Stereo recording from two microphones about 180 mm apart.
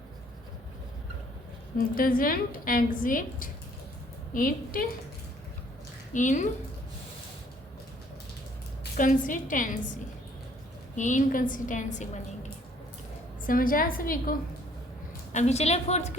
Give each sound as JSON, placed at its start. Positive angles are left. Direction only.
{"t": 2.0, "sound": "a woman's voice", "side_deg": 55}
{"t": 6.1, "sound": "a woman's voice", "side_deg": 45}
{"t": 9.0, "sound": "a woman's voice", "side_deg": 50}
{"t": 10.9, "sound": "a woman's voice", "side_deg": 45}
{"t": 13.5, "sound": "a woman's voice", "side_deg": 50}
{"t": 15.3, "sound": "a woman's voice", "side_deg": 40}